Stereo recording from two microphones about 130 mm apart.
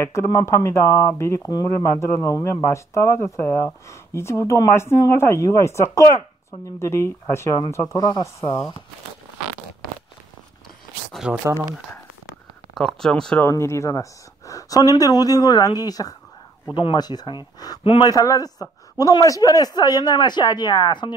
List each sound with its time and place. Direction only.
0.0 s speech: 20° left (ahead or behind)
11.2 s speech: 5° right (ahead or behind)
12.7 s speech: 5° left (ahead or behind)
13.5 s speech: 20° left (ahead or behind); by 18.1 s 40° left (ahead or behind)
18.1 s speech: 25° left (ahead or behind)